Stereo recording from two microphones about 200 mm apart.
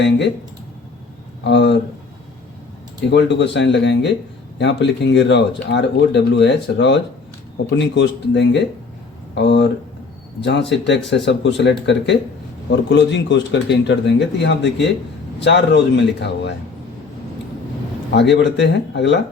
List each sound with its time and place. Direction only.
1.5 s speech: 60° left (ahead or behind)
3.1 s speech: 60° left (ahead or behind)
18.1 s speech: 60° left (ahead or behind)